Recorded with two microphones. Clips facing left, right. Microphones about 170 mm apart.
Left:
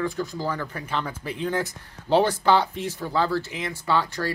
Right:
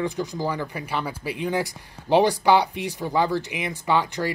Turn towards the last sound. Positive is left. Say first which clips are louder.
# right 2 dB
turn(degrees=-15)  # may be behind; listen again after turning